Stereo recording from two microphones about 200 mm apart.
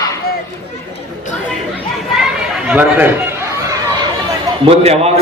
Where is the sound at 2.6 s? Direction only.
5° right (ahead or behind).